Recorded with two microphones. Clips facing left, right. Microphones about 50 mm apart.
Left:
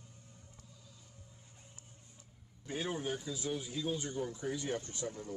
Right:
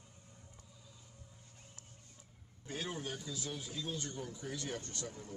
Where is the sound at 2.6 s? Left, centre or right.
Centre.